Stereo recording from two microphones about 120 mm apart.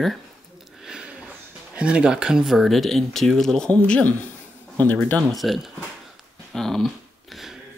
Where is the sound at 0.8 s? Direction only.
5° right (ahead or behind).